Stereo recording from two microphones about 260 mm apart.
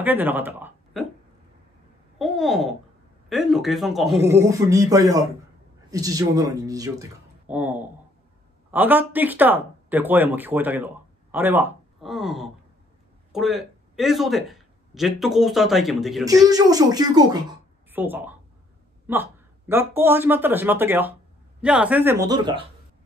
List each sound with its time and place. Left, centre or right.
0.0 s speech: centre
2.1 s speech: centre
4.2 s a man's voice: centre
16.4 s speech: centre